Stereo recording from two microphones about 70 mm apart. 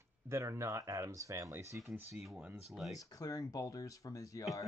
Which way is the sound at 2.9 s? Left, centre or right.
Left.